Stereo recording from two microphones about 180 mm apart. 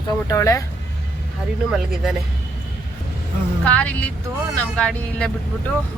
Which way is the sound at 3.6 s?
5° left (ahead or behind).